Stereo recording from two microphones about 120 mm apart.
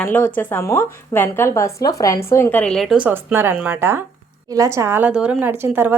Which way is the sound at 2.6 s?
5° left (ahead or behind).